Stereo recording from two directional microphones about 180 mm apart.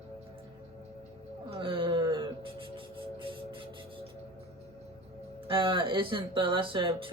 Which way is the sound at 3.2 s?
30° right (ahead or behind).